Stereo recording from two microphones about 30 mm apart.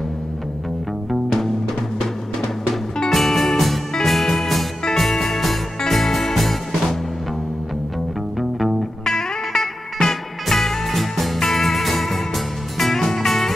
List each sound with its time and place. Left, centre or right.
3.1 s music: centre
8.4 s music: centre
9.0 s music: centre